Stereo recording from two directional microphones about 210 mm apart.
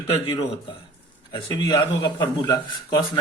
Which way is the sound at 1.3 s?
20° left (ahead or behind).